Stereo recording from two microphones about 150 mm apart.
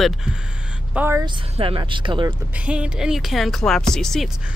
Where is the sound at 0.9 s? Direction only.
15° right (ahead or behind).